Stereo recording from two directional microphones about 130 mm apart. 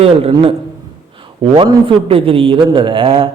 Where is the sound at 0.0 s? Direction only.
45° right (ahead or behind).